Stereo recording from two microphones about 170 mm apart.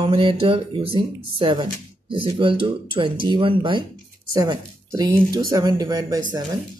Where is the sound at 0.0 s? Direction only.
30° right (ahead or behind).